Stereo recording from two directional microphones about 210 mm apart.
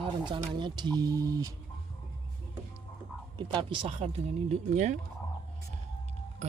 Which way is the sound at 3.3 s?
25° right (ahead or behind).